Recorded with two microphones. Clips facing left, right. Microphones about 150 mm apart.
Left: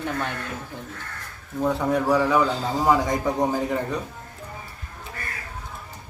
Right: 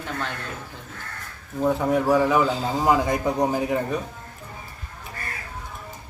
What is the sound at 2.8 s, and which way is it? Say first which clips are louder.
A man's voice: even; 20° right (ahead or behind).